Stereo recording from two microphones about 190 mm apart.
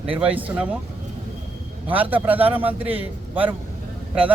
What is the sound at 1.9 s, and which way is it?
Speech, 10° right (ahead or behind).